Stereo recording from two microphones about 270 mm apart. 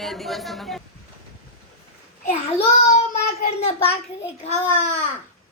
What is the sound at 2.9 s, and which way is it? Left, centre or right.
Child singing, left.